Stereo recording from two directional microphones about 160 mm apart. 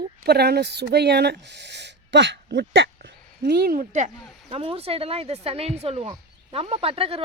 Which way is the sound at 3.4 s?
75° right (ahead or behind).